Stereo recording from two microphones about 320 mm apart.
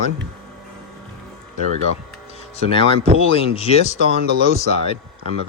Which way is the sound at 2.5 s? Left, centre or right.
Centre.